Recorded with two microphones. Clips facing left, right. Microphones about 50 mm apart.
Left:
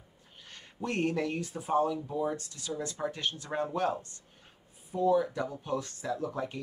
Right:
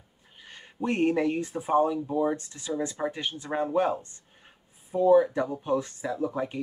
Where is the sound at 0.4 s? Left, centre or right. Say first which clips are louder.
Right 6 dB; centre.